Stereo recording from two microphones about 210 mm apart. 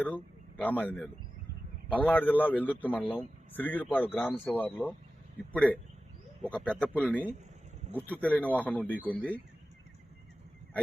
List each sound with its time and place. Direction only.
0.0 s a man's voice: 10° left (ahead or behind)